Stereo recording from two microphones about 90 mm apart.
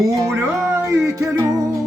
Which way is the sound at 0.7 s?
35° right (ahead or behind).